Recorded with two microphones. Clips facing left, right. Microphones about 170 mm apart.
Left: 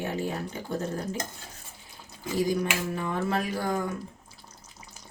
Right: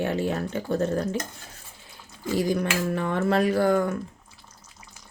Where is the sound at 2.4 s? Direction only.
65° right (ahead or behind).